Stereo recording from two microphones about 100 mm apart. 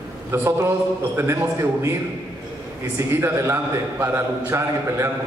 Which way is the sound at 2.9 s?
25° right (ahead or behind).